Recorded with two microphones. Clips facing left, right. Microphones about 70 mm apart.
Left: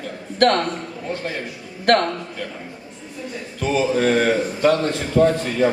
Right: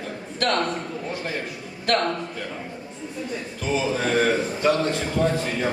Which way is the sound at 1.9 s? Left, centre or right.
Left.